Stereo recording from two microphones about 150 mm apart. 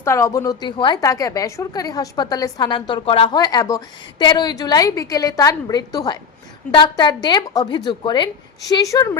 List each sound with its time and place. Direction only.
0.0 s a woman's voice: 20° left (ahead or behind)